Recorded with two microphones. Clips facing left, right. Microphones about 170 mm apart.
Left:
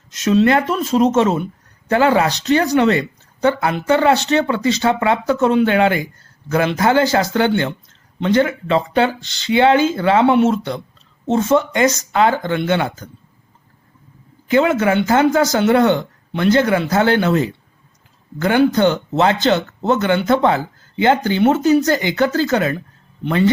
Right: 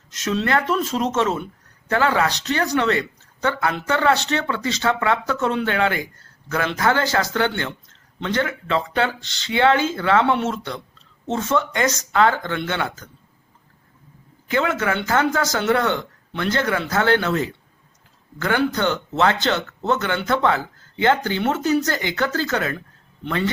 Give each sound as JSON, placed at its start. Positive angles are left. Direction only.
{"t": 0.1, "sound": "speech", "side_deg": 15}
{"t": 14.5, "sound": "speech", "side_deg": 20}